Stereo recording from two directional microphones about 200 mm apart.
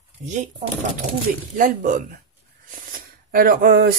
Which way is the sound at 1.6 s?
40° right (ahead or behind).